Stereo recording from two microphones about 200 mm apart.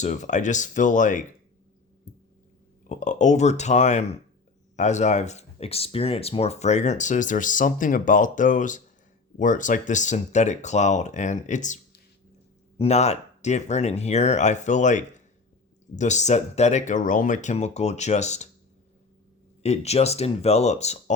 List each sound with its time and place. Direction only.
0.0 s speech: 35° left (ahead or behind)
2.8 s speech: 40° left (ahead or behind)
19.6 s speech: 30° left (ahead or behind)